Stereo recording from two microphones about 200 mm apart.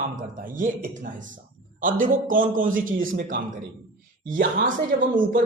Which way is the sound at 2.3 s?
40° right (ahead or behind).